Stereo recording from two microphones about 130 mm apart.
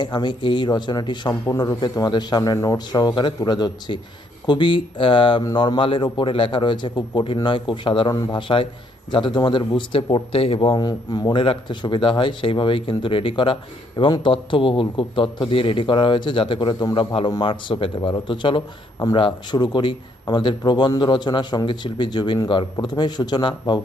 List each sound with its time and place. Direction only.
0.0 s a man's voice: 35° left (ahead or behind)
1.3 s a man's voice: 25° left (ahead or behind)